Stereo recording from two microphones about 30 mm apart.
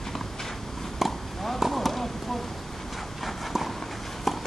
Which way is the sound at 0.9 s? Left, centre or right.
Centre.